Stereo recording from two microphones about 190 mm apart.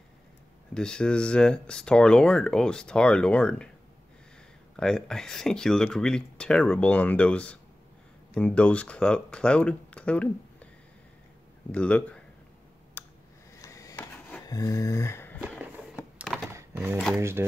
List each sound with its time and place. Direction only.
0.7 s speech: 5° left (ahead or behind)
4.7 s speech: 5° left (ahead or behind)
11.7 s speech: 5° left (ahead or behind)
13.0 s a sound: 10° left (ahead or behind)
16.5 s a sound: 10° right (ahead or behind)
17.2 s speech: 15° right (ahead or behind)